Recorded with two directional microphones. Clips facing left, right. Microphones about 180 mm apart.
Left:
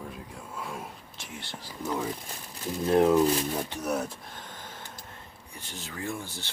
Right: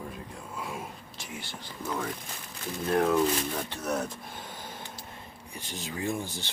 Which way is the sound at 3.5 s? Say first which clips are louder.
Left 1 dB; 10° left (ahead or behind).